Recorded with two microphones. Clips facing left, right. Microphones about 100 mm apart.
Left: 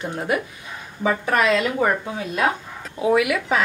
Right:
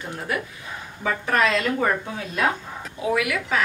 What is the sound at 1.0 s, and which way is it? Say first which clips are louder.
A woman's voice: left 2 dB; 15° left (ahead or behind).